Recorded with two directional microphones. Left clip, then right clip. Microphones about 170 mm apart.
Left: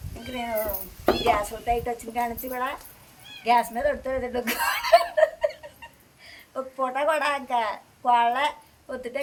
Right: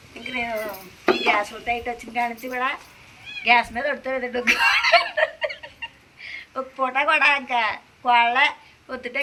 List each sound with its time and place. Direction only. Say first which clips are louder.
1.0 s dishes: right 2 dB; 25° left (ahead or behind)
1.4 s a woman's voice: right 1 dB; 25° left (ahead or behind)
6.5 s speech: right 2 dB; 10° left (ahead or behind)
6.8 s a woman's voice: right 6 dB; 25° left (ahead or behind)